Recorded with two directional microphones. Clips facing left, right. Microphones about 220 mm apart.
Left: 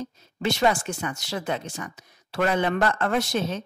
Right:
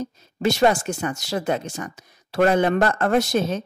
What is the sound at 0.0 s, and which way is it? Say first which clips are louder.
Speech: right 5 dB; 40° right (ahead or behind).